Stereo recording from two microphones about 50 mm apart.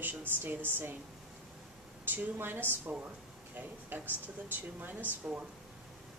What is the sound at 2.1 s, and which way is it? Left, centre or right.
A woman's voice, right.